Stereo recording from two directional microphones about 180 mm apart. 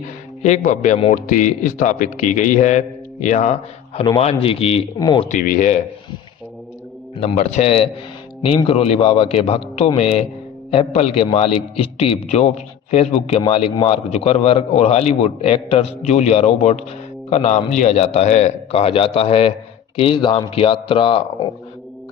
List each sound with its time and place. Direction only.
0.4 s a man's voice: 40° left (ahead or behind)
5.3 s a man's voice: 50° left (ahead or behind)
7.2 s a man's voice: 35° left (ahead or behind)